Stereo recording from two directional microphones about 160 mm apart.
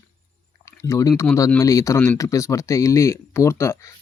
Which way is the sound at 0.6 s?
20° left (ahead or behind).